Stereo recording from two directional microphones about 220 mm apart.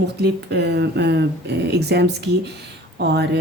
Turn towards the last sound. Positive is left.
turn(degrees=-50)  # may be behind; listen again after turning